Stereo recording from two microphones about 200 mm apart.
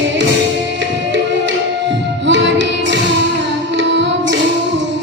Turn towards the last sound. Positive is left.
turn(degrees=-65)  # may be behind; listen again after turning